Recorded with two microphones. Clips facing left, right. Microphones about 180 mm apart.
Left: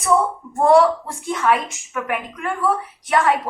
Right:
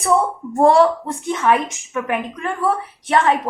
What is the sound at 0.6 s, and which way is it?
A woman's voice, 30° right (ahead or behind).